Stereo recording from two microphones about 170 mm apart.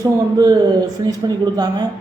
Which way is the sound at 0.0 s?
20° right (ahead or behind).